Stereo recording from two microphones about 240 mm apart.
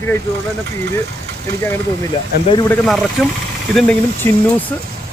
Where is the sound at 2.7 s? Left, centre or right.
Centre.